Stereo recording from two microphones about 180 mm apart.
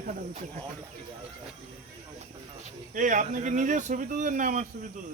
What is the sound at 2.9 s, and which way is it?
Speech, 45° right (ahead or behind).